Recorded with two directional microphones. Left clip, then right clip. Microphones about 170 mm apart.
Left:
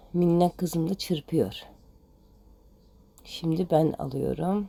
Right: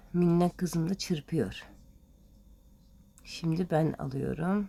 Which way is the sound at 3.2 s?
Centre (ahead or behind).